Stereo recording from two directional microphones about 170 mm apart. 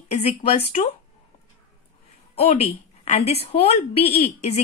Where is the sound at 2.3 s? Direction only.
35° left (ahead or behind).